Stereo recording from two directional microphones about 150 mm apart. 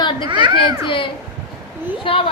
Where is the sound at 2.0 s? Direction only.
35° left (ahead or behind).